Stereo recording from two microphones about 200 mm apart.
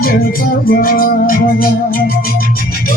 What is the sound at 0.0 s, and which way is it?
Music, 45° left (ahead or behind).